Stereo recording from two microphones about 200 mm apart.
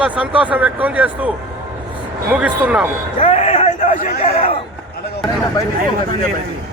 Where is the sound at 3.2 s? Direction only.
35° left (ahead or behind).